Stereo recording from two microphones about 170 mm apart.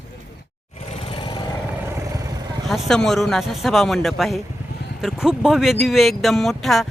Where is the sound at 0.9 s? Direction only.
35° left (ahead or behind).